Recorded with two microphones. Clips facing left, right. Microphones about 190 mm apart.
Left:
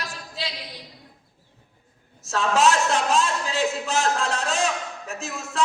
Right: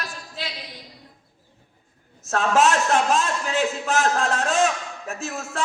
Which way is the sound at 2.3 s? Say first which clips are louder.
Right 1 dB; 50° right (ahead or behind).